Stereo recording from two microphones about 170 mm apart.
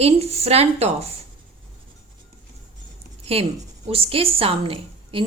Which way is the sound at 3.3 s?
35° right (ahead or behind).